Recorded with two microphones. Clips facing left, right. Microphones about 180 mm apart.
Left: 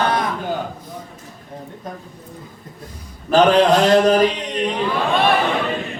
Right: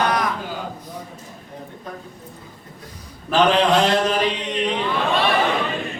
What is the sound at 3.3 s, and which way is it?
Mantra, 40° left (ahead or behind).